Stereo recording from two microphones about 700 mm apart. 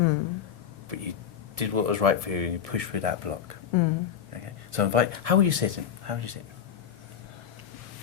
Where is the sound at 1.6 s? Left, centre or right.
Right.